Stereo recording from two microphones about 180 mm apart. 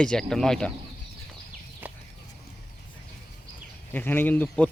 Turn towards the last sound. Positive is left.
turn(degrees=10)  # may be behind; listen again after turning